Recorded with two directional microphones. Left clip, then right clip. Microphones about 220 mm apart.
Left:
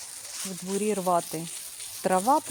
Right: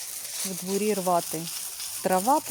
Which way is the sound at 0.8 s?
Centre (ahead or behind).